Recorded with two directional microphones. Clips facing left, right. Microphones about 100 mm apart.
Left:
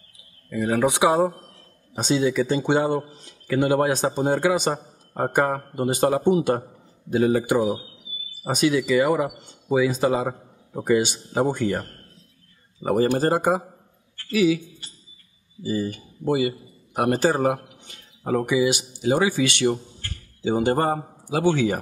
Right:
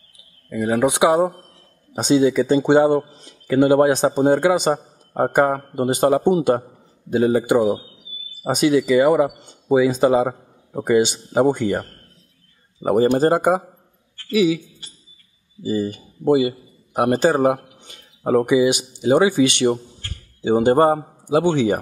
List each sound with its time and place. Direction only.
0.5 s a man's voice: 20° right (ahead or behind)
15.6 s a man's voice: 25° right (ahead or behind)